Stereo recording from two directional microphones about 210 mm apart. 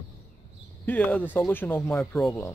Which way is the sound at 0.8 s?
10° left (ahead or behind).